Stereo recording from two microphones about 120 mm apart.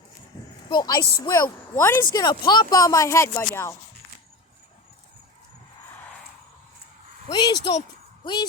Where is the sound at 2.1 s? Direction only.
35° left (ahead or behind); by 3.7 s 20° left (ahead or behind).